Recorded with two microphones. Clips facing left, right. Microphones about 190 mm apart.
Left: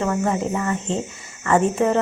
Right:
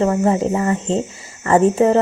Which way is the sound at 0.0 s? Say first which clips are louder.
Right 5 dB; 30° right (ahead or behind).